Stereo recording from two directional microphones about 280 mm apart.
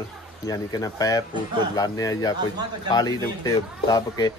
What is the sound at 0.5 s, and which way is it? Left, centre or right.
Speech, centre.